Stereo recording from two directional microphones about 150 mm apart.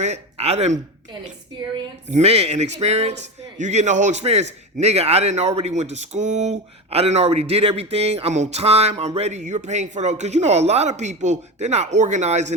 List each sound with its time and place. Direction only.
0.0 s speech: 45° right (ahead or behind)
2.0 s a man's voice: 45° right (ahead or behind)